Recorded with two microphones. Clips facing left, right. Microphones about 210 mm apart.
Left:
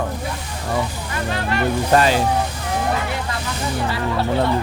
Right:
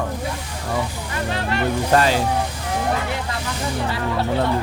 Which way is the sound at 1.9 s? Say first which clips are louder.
Left 1 dB; 15° left (ahead or behind).